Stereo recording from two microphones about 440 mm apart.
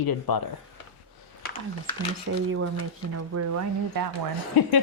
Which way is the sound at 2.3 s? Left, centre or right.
Right.